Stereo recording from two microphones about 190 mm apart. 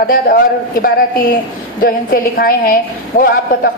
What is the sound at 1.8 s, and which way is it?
A woman's voice, 50° left (ahead or behind).